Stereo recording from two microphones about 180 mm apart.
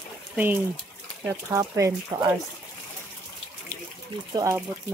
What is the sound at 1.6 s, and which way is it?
Speech, 20° right (ahead or behind).